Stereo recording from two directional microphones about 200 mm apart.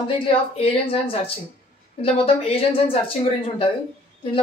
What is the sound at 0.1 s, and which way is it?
Speech, 30° left (ahead or behind).